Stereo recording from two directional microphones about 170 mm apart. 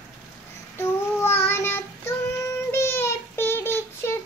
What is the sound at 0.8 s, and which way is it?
Child singing, 15° left (ahead or behind).